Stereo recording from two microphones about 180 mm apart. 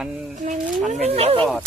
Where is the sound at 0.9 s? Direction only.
35° right (ahead or behind).